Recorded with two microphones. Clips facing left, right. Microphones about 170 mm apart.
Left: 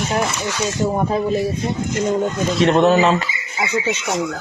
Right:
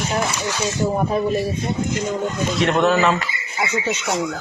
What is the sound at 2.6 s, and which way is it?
Speech, 30° left (ahead or behind).